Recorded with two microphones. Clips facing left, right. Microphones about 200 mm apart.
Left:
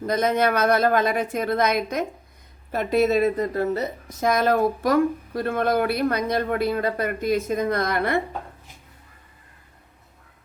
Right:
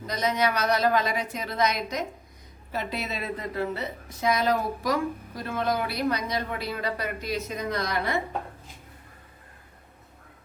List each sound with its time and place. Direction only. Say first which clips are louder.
0.0 s a woman's voice: left 5 dB; 55° left (ahead or behind)